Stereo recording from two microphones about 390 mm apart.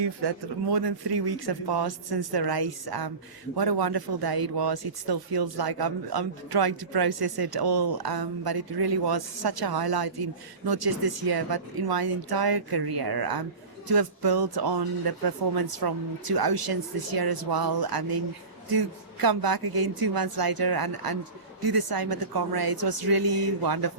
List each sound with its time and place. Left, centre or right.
0.0 s speech: right